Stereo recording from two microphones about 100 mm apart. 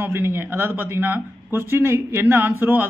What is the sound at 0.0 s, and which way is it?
A man's voice, 25° right (ahead or behind).